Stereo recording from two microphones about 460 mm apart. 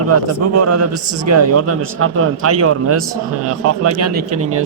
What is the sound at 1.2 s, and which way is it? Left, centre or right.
A man's voice, right.